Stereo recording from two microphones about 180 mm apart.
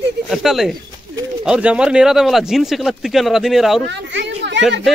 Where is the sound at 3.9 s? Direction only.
75° right (ahead or behind).